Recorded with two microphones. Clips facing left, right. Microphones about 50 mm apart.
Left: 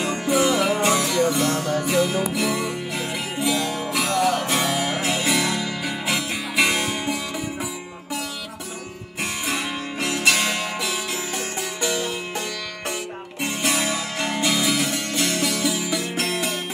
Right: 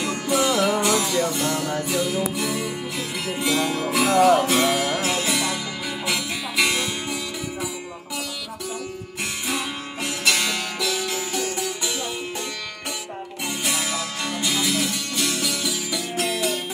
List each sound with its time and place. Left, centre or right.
0.0 s music: left
0.7 s music: left
3.3 s music: centre
4.6 s music: centre
4.8 s music: centre
5.4 s music: left
9.2 s music: left
10.1 s music: left
13.4 s music: left